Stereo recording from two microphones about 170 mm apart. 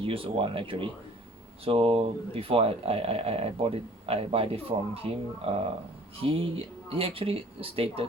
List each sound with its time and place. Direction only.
0.0 s speech: 35° right (ahead or behind)